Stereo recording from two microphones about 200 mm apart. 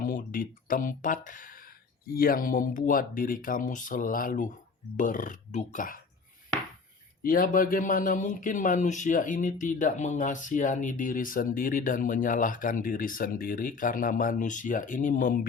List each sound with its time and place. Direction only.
0.0 s speech: 40° left (ahead or behind)
7.2 s speech: 45° left (ahead or behind)